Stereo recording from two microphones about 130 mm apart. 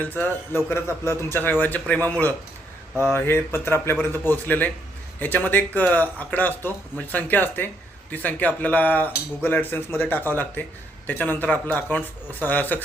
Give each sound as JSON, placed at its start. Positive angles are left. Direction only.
{"t": 0.0, "sound": "speech", "side_deg": 15}